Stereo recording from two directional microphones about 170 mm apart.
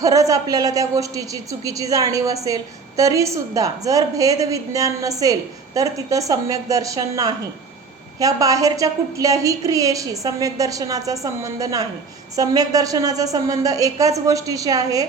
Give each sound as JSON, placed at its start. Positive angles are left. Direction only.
{"t": 0.0, "sound": "a woman's voice", "side_deg": -20}